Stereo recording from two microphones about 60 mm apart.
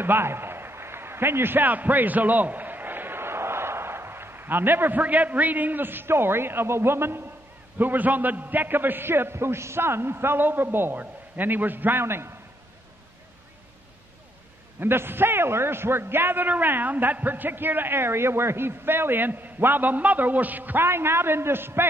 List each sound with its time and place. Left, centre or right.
0.0 s a man's voice: right
7.8 s a man's voice: right
14.8 s a man's voice: right
20.8 s a man's voice: right